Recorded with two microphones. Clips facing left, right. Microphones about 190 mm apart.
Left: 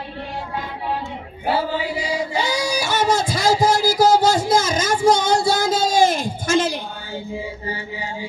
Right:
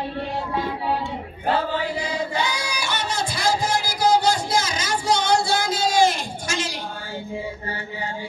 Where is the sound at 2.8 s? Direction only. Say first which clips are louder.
Left 7 dB; 45° left (ahead or behind).